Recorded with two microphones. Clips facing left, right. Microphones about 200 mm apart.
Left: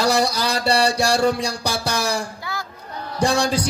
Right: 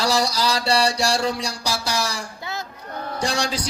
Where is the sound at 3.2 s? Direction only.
55° left (ahead or behind).